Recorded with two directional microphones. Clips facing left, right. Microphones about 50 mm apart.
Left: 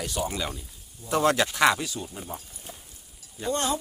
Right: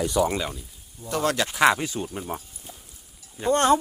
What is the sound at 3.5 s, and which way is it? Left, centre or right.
Speech, right.